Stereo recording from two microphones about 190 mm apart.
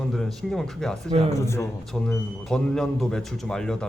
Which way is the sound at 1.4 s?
15° left (ahead or behind).